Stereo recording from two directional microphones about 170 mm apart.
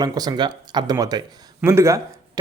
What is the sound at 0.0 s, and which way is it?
Speech, 25° right (ahead or behind).